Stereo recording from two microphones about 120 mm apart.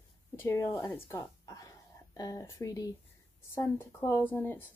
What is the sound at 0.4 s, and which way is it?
Speech, 25° left (ahead or behind).